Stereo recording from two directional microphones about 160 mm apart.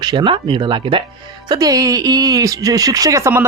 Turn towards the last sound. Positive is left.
turn(degrees=-20)  # may be behind; listen again after turning